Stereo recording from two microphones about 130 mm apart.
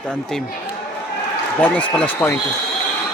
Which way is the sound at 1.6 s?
10° left (ahead or behind).